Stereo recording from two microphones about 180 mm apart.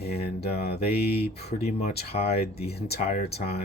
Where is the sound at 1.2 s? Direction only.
60° left (ahead or behind).